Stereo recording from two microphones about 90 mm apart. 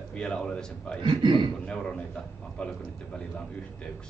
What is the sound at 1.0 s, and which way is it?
Speech, 60° right (ahead or behind).